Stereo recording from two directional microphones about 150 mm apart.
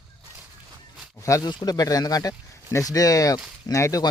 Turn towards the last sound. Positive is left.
turn(degrees=20)  # may be behind; listen again after turning